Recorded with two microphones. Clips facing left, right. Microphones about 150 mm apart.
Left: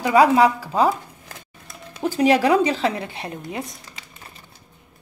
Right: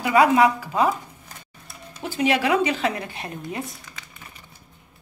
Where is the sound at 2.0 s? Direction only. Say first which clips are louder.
Left 5 dB; 40° left (ahead or behind); by 3.3 s 25° left (ahead or behind).